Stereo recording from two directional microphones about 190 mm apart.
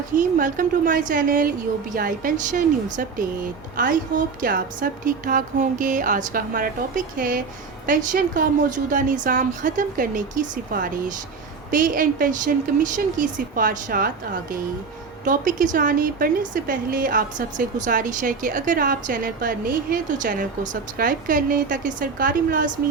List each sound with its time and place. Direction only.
0.1 s speech: 45° right (ahead or behind)
15.2 s speech: 45° right (ahead or behind)